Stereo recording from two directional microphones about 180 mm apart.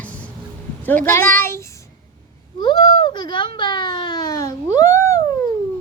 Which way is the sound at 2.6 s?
25° left (ahead or behind).